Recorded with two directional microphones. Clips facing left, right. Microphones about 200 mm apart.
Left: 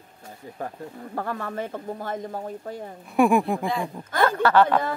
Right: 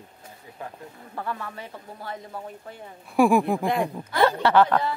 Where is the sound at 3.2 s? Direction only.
Centre (ahead or behind).